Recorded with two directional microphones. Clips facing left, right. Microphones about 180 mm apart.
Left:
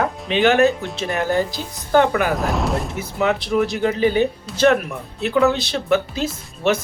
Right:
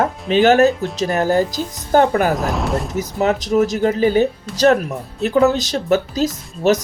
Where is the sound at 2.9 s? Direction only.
40° right (ahead or behind).